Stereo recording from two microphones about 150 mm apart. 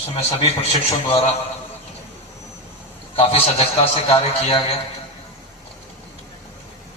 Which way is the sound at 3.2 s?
45° left (ahead or behind).